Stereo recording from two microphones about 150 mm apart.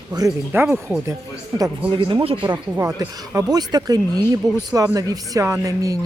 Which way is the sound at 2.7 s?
20° right (ahead or behind).